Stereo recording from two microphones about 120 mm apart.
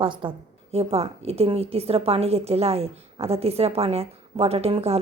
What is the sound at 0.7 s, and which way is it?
A woman's voice, 55° right (ahead or behind).